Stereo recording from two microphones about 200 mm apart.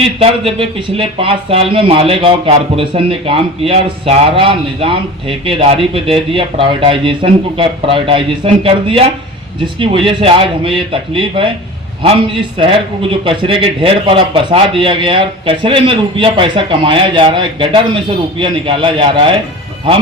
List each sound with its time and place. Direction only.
0.0 s a man's voice: 25° right (ahead or behind)